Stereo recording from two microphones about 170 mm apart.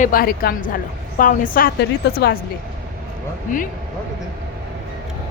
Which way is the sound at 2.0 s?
75° left (ahead or behind).